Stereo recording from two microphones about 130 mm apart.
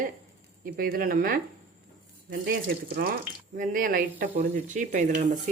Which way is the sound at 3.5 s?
85° right.